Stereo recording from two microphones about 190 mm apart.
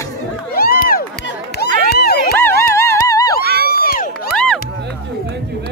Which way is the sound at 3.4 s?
55° right (ahead or behind).